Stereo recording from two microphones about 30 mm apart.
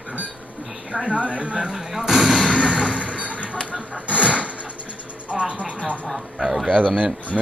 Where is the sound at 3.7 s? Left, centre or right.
Right.